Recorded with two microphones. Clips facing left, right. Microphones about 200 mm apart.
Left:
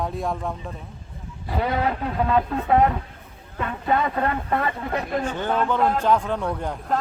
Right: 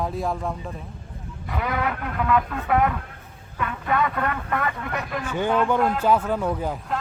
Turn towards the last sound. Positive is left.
turn(degrees=-5)  # may be behind; listen again after turning